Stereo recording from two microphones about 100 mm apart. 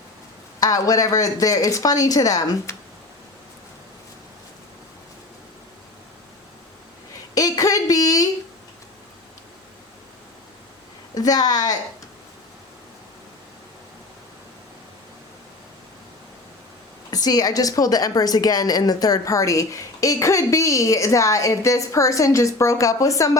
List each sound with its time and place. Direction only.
0.6 s a woman's voice: 35° left (ahead or behind)
7.3 s a sound: 35° left (ahead or behind)
11.1 s a woman's voice: 40° left (ahead or behind)
17.1 s a woman's voice: 40° left (ahead or behind)